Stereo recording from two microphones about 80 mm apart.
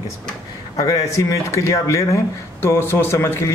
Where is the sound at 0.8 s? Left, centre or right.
Left.